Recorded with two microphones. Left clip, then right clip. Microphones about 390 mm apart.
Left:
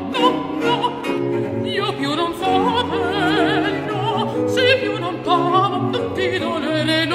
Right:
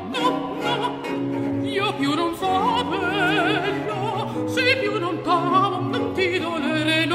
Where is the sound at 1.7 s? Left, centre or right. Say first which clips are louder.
Left 1 dB; right.